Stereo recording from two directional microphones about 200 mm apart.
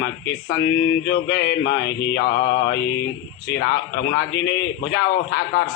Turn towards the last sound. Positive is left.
turn(degrees=55)  # may be behind; listen again after turning